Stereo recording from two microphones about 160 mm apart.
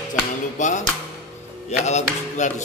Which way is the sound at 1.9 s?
45° left (ahead or behind).